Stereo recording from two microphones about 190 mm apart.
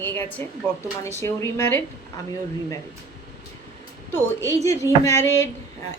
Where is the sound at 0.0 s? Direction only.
10° left (ahead or behind).